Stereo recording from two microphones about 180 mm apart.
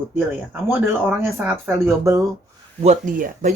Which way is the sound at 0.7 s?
10° right (ahead or behind).